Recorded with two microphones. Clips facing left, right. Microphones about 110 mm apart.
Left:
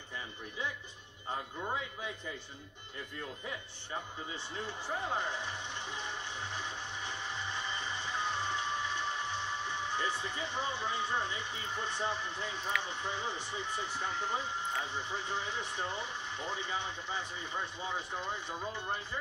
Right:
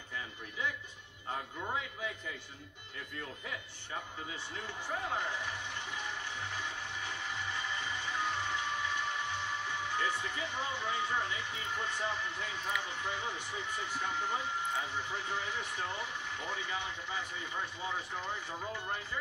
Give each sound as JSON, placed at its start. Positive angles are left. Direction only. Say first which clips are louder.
{"t": 4.6, "sound": "music", "louder": "left 2 dB", "side_deg": 30}
{"t": 12.8, "sound": "speech", "louder": "left 1 dB", "side_deg": 25}